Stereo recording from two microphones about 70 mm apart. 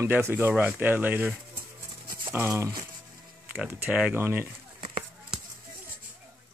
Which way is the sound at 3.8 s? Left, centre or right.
Centre.